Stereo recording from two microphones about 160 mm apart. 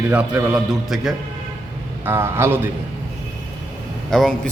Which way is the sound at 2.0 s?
15° right (ahead or behind).